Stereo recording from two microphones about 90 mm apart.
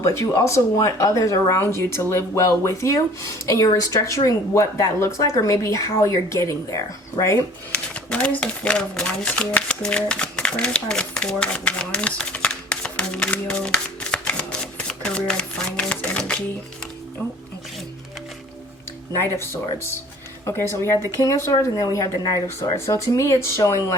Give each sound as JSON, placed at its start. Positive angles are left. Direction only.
{"t": 0.0, "sound": "speech", "side_deg": 35}
{"t": 7.7, "sound": "speech", "side_deg": 10}
{"t": 20.4, "sound": "speech", "side_deg": 30}